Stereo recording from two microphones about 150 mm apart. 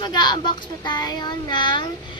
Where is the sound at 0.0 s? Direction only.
30° left (ahead or behind).